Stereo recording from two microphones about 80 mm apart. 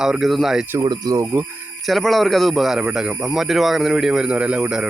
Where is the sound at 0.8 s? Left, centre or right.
Right.